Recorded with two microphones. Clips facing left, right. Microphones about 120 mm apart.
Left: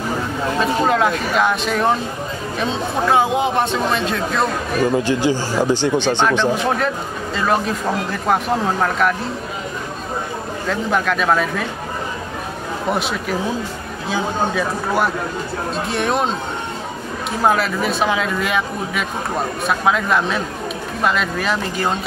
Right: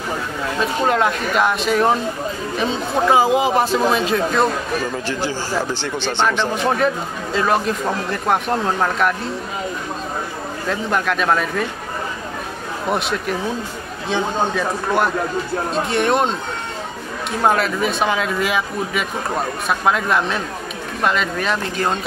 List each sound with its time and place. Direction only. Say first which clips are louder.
0.6 s speech: left 1 dB; centre (ahead or behind)
4.9 s speech: left 6 dB; 15° left (ahead or behind)
6.5 s speech: right 1 dB; centre (ahead or behind)
10.7 s speech: left 1 dB; centre (ahead or behind)
12.9 s speech: right 2 dB; centre (ahead or behind)
17.4 s speech: even; centre (ahead or behind)